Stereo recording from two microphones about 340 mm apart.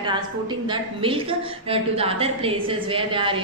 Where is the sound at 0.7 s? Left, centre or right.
Centre.